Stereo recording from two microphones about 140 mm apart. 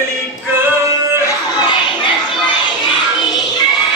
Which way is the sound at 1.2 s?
30° left (ahead or behind).